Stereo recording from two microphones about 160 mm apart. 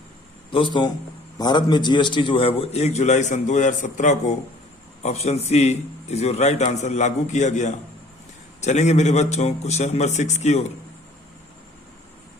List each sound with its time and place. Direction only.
0.5 s a man's voice: 30° left (ahead or behind); by 10.7 s 45° left (ahead or behind)